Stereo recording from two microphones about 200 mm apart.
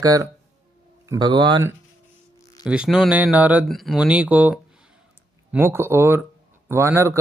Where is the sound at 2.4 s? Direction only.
15° left (ahead or behind).